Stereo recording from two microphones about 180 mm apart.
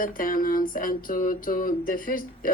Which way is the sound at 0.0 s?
50° left (ahead or behind).